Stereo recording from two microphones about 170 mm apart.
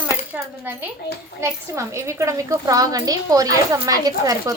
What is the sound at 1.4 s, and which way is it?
A woman's voice, 15° right (ahead or behind).